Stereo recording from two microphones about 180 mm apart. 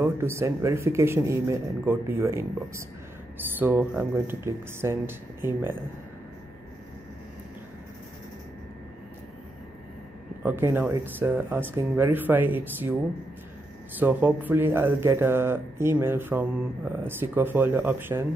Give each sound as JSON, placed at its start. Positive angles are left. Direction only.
{"t": 0.0, "sound": "speech", "side_deg": -15}
{"t": 10.4, "sound": "speech", "side_deg": -10}
{"t": 13.9, "sound": "speech", "side_deg": -10}